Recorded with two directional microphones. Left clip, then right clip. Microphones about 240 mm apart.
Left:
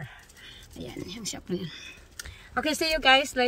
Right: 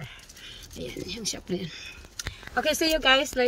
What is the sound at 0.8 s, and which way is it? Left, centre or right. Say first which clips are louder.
Speech: right 4 dB; left.